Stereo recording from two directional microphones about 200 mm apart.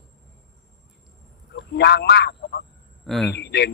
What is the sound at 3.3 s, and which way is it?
Speech, 55° left (ahead or behind).